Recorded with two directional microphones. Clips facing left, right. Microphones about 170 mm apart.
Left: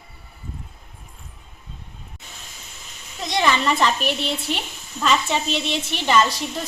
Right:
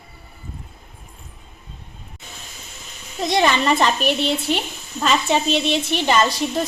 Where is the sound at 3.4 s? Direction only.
35° right (ahead or behind).